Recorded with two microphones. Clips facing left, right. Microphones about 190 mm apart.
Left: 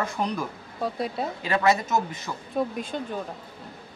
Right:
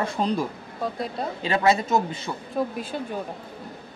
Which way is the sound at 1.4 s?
30° right (ahead or behind).